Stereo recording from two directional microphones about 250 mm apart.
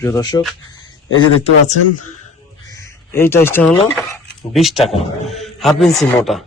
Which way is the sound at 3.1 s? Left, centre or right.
Centre.